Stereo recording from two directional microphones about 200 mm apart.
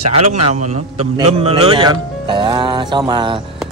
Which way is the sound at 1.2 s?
30° right (ahead or behind).